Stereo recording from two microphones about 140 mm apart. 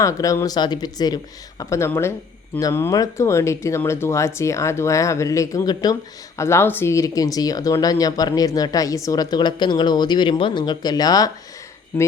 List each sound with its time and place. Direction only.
0.0 s speech: 25° left (ahead or behind)